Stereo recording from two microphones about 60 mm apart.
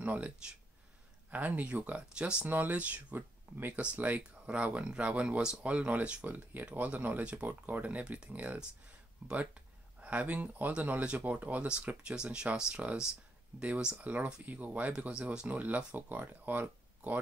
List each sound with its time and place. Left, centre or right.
0.0 s speech: right
1.3 s speech: right
2.4 s speech: right